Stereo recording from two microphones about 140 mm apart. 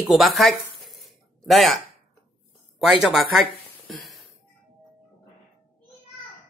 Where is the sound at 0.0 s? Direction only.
Centre (ahead or behind).